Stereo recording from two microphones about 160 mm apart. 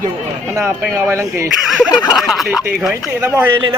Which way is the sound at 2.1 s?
Centre (ahead or behind).